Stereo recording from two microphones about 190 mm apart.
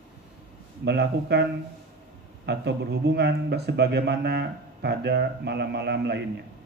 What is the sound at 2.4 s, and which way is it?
A man's voice, 60° right (ahead or behind).